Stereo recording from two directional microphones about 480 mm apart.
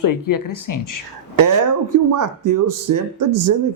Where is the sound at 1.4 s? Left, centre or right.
Right.